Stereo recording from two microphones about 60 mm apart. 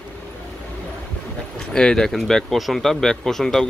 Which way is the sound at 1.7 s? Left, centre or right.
Centre.